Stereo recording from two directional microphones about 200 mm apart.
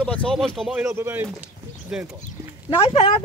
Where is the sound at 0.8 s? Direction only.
10° right (ahead or behind).